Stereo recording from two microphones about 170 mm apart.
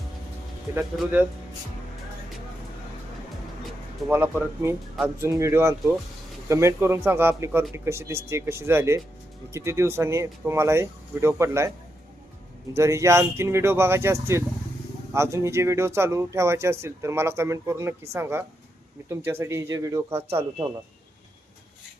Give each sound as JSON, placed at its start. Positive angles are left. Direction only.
{"t": 0.7, "sound": "speech", "side_deg": -15}
{"t": 4.0, "sound": "speech", "side_deg": 0}
{"t": 5.0, "sound": "speech", "side_deg": -15}
{"t": 12.7, "sound": "speech", "side_deg": -15}